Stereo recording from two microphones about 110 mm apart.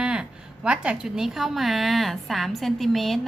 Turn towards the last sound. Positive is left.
turn(degrees=0)  # may be behind; listen again after turning